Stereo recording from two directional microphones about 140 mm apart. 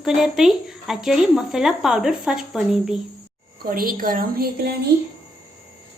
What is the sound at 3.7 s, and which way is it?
A woman's voice, 85° right.